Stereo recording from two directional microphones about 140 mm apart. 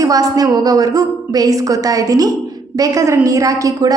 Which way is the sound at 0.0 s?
25° right (ahead or behind).